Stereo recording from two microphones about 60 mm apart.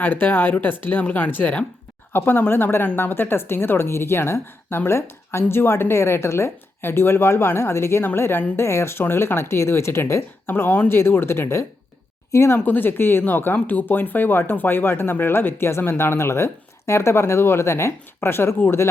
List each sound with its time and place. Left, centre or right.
0.0 s a woman's voice: left
10.4 s a woman's voice: left
12.6 s speech: left